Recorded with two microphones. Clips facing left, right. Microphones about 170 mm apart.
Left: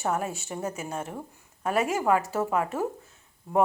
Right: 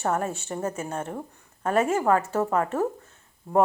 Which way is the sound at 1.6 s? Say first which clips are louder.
Right 3 dB; 10° left (ahead or behind).